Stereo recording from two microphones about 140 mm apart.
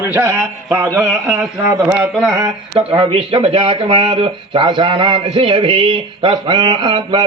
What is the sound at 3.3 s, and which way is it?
A man's voice, 40° right (ahead or behind).